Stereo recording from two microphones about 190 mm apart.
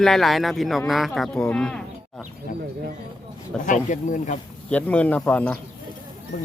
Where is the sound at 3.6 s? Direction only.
40° left (ahead or behind).